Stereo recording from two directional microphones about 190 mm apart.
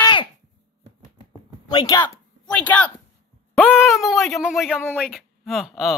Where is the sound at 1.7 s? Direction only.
20° left (ahead or behind).